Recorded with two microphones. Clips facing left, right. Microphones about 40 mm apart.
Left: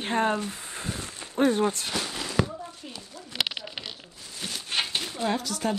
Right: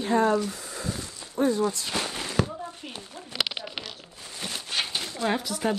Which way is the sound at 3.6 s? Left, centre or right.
Right.